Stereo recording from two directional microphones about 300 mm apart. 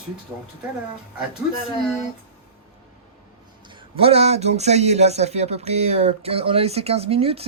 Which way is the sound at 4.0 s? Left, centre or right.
Centre.